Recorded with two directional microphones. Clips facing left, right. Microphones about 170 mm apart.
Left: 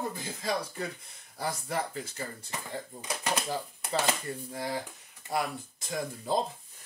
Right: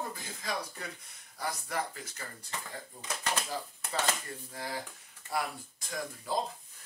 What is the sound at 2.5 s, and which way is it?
Speech, 10° left (ahead or behind).